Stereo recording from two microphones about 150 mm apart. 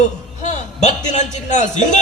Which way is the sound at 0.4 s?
50° left (ahead or behind).